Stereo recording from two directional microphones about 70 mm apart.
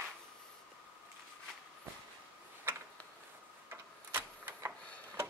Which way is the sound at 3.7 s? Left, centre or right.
Right.